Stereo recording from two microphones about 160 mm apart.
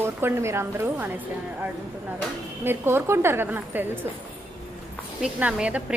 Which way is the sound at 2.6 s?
15° right (ahead or behind).